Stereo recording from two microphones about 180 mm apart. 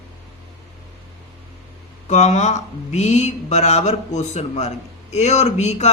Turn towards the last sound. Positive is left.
turn(degrees=40)  # may be behind; listen again after turning